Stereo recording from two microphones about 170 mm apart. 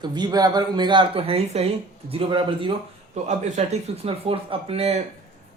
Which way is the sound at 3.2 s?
45° right (ahead or behind).